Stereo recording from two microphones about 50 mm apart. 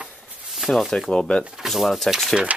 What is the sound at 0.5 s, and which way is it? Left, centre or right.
Speech, centre.